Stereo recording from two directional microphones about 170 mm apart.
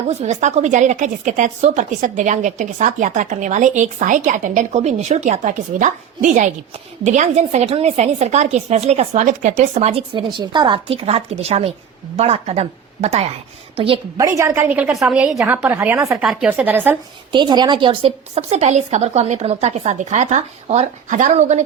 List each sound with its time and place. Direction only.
0.1 s a woman's voice: 40° right (ahead or behind)
14.2 s a woman's voice: 20° right (ahead or behind)
17.3 s a woman's voice: 25° right (ahead or behind); by 21.6 s 40° right (ahead or behind)